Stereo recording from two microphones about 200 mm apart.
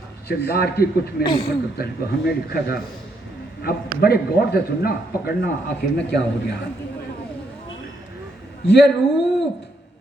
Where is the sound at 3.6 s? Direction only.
50° left (ahead or behind).